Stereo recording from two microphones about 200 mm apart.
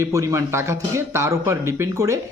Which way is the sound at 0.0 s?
15° right (ahead or behind).